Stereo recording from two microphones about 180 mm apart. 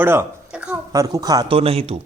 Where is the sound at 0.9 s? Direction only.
20° right (ahead or behind).